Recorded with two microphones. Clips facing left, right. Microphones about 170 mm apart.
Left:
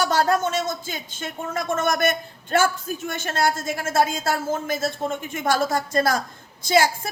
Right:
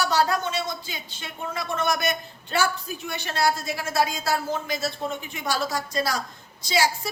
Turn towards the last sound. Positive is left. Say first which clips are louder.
# left 5 dB
turn(degrees=50)  # may be behind; listen again after turning